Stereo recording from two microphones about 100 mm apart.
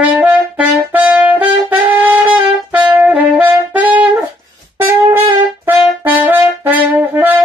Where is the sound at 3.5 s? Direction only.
15° right (ahead or behind).